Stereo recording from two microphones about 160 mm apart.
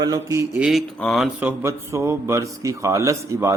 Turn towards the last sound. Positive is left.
turn(degrees=-20)  # may be behind; listen again after turning